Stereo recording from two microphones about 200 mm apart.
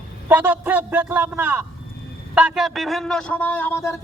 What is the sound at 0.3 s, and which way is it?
A man's voice, 10° right (ahead or behind).